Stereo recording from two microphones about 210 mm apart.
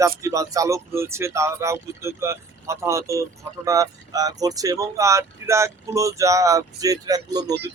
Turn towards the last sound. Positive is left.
turn(degrees=-20)  # may be behind; listen again after turning